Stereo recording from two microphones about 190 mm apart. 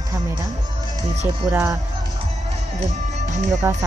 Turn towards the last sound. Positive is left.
turn(degrees=-15)  # may be behind; listen again after turning